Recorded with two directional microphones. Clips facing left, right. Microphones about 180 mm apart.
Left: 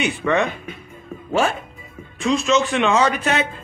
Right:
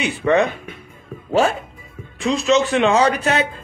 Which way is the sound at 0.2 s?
35° right (ahead or behind).